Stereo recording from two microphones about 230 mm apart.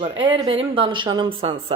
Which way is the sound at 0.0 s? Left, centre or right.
Right.